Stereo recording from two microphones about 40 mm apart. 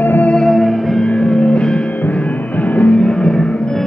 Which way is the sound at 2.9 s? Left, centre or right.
Left.